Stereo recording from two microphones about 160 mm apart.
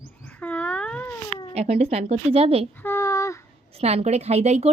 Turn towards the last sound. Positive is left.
turn(degrees=-40)  # may be behind; listen again after turning